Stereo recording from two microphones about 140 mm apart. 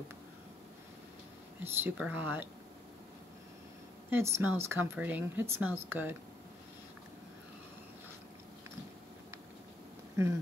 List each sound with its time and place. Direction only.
1.6 s speech: 15° right (ahead or behind)
4.1 s speech: 15° right (ahead or behind)
10.2 s speech: 20° right (ahead or behind)